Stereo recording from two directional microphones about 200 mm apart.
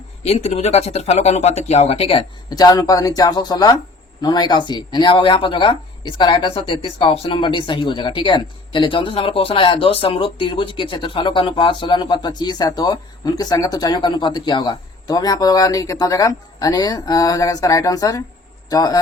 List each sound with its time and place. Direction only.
0.2 s speech: 30° left (ahead or behind)